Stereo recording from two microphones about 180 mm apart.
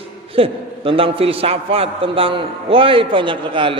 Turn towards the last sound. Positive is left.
turn(degrees=-30)  # may be behind; listen again after turning